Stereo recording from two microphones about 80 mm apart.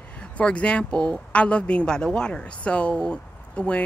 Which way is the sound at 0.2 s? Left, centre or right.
Centre.